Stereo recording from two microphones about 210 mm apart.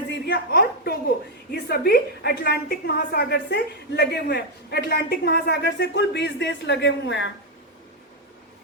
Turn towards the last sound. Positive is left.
turn(degrees=55)  # may be behind; listen again after turning